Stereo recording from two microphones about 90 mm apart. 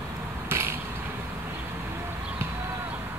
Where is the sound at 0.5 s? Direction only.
25° right (ahead or behind).